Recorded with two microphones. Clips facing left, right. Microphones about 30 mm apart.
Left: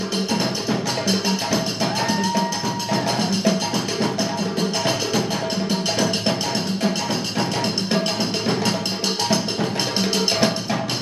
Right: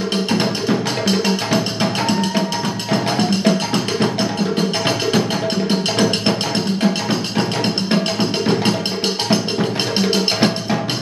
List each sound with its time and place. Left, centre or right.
0.3 s music: right
2.9 s music: right
5.7 s music: right
6.8 s music: right